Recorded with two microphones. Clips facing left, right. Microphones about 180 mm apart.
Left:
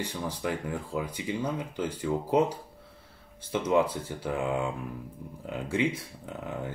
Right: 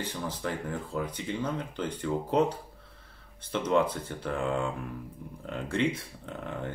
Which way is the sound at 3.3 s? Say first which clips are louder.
Left 1 dB; 10° left (ahead or behind).